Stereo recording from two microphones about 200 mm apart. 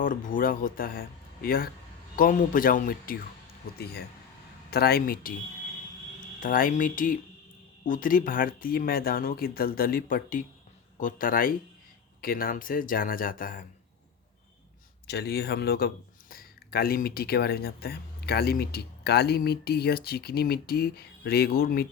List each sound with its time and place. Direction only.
0.0 s speech: 40° left (ahead or behind)
4.7 s speech: 50° left (ahead or behind)
6.4 s speech: 45° left (ahead or behind)
15.0 s speech: 55° left (ahead or behind)